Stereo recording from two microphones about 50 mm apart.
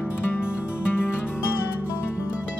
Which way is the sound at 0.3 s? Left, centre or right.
Left.